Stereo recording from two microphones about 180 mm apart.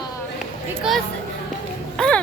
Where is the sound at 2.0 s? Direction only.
5° left (ahead or behind).